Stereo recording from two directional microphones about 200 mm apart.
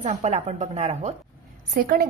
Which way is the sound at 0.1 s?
35° right (ahead or behind).